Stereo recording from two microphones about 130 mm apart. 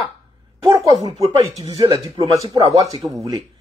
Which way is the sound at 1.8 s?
30° right (ahead or behind).